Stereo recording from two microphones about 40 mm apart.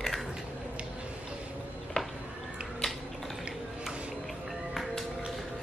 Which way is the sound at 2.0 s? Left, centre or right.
Centre.